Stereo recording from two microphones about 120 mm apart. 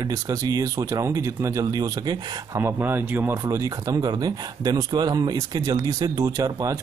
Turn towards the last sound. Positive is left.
turn(degrees=-30)  # may be behind; listen again after turning